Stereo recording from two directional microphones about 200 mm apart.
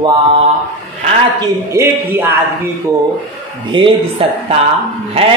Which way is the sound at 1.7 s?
10° right (ahead or behind).